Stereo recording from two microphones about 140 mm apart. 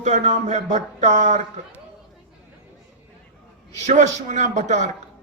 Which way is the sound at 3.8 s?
55° right (ahead or behind).